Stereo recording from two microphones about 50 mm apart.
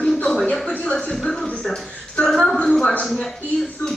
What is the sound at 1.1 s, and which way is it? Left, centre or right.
Speech, centre.